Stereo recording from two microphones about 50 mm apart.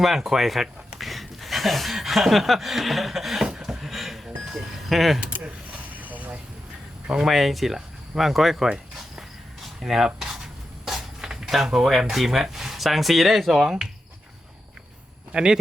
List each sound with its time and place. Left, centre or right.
0.0 s speech: centre
3.6 s a sound: centre
6.0 s vehicle: right
7.3 s speech: centre
9.6 s a sound: centre
11.9 s speech: centre
15.3 s speech: centre